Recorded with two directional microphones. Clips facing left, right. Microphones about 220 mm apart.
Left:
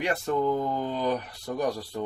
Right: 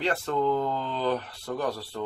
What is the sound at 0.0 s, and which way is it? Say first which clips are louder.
Speech: even; 15° left (ahead or behind).